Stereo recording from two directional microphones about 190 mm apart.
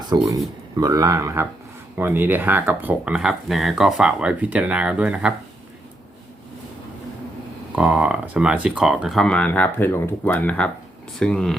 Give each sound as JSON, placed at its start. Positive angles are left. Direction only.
{"t": 0.1, "sound": "speech", "side_deg": -20}
{"t": 7.8, "sound": "speech", "side_deg": -5}